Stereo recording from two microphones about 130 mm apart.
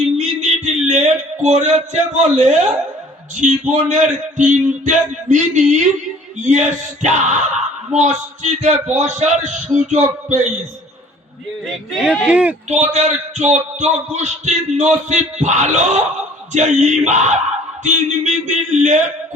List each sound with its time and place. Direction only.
0.0 s a sound: 60° right (ahead or behind)
3.3 s a man's voice: 70° right (ahead or behind)
11.6 s speech: 5° right (ahead or behind)
12.6 s a man's voice: 60° right (ahead or behind)
18.4 s speech: 70° right (ahead or behind)